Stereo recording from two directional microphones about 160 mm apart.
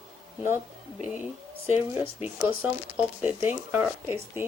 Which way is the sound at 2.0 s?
10° right (ahead or behind).